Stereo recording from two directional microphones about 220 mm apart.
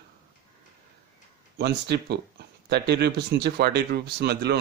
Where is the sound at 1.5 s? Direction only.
50° right (ahead or behind).